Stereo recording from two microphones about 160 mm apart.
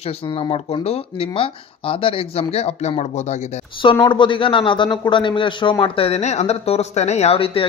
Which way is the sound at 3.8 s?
30° left (ahead or behind).